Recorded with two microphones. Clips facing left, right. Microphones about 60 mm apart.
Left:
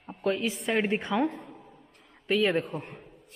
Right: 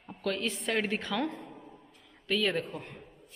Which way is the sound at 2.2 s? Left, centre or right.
Left.